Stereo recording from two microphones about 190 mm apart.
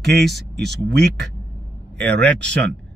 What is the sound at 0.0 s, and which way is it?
Speech, 60° right (ahead or behind).